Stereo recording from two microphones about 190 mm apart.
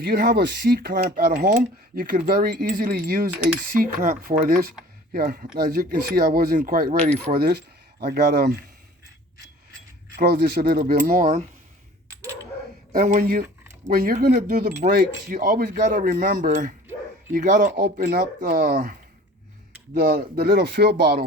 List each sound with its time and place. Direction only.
0.0 s speech: 50° right (ahead or behind)
10.2 s speech: 55° right (ahead or behind)
12.9 s speech: 45° right (ahead or behind)